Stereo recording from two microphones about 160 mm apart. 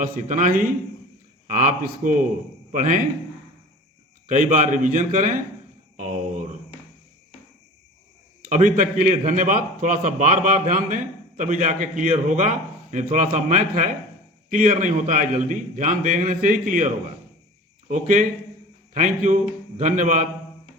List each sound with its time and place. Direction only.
0.0 s a man's voice: 55° right (ahead or behind)
4.3 s a man's voice: 50° right (ahead or behind)
8.4 s a man's voice: 50° right (ahead or behind)